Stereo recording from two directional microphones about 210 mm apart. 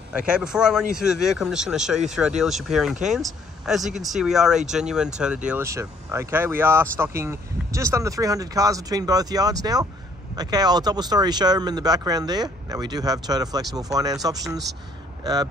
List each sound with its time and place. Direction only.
0.3 s speech: 5° right (ahead or behind)